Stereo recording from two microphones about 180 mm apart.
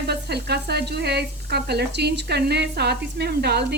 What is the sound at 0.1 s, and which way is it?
Speech, 65° right (ahead or behind).